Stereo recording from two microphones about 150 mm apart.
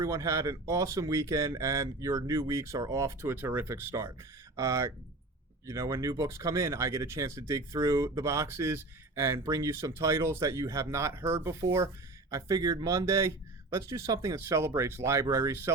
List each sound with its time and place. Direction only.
0.0 s speech: 20° right (ahead or behind)